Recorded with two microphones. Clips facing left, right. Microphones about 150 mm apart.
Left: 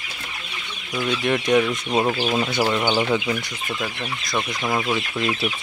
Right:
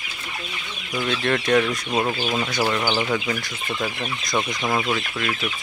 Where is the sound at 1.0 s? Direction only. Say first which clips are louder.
Left 1 dB; 15° left (ahead or behind).